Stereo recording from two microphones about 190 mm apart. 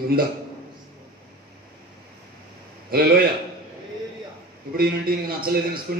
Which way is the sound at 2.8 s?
50° right (ahead or behind).